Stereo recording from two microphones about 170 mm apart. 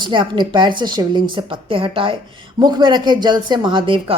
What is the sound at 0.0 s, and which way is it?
A woman's voice, 30° right (ahead or behind).